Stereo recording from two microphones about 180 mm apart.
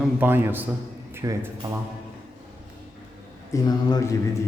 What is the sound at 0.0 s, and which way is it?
A man's voice, 10° right (ahead or behind).